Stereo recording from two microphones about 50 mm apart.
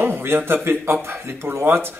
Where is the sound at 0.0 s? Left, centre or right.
Right.